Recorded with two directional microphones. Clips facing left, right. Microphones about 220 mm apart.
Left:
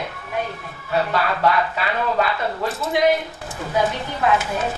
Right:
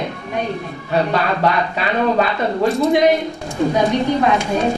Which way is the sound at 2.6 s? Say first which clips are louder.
Right 6 dB; 5° left (ahead or behind).